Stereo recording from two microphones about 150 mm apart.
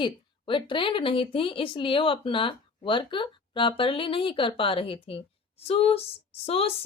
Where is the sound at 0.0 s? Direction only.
35° left (ahead or behind).